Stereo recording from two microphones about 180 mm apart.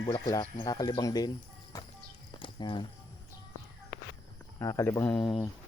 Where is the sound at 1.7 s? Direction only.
20° left (ahead or behind).